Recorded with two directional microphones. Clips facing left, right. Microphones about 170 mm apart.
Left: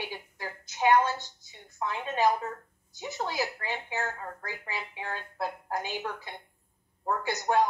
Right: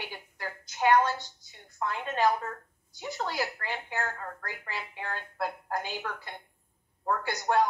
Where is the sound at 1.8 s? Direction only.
10° left (ahead or behind).